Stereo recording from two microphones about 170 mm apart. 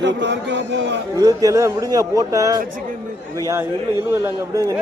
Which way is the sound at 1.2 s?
20° right (ahead or behind).